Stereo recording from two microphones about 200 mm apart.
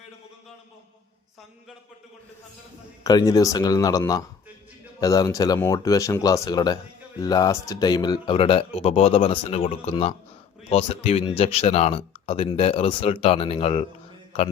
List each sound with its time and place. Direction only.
3.0 s speech: 20° left (ahead or behind)